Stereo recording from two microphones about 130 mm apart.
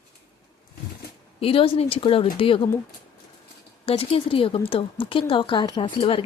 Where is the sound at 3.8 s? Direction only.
45° left (ahead or behind).